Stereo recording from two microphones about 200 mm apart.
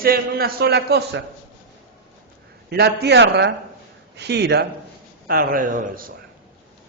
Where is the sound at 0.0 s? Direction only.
50° right (ahead or behind).